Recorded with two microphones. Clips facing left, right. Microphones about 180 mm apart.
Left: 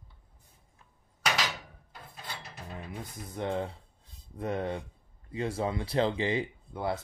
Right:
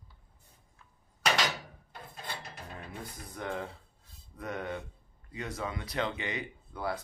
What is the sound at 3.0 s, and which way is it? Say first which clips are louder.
Speech: left 5 dB; 25° left (ahead or behind).